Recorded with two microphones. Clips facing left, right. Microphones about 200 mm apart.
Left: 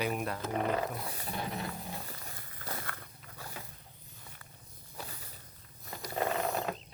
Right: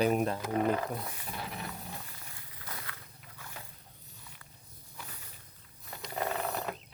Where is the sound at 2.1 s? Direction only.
45° left (ahead or behind).